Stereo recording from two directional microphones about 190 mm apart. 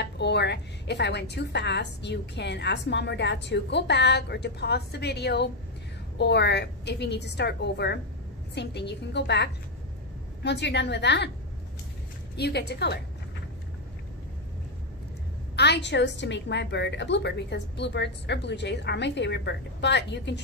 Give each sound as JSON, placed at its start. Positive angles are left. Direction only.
{"t": 0.0, "sound": "a woman's voice", "side_deg": 60}
{"t": 12.4, "sound": "a woman's voice", "side_deg": 60}
{"t": 15.5, "sound": "a woman's voice", "side_deg": 60}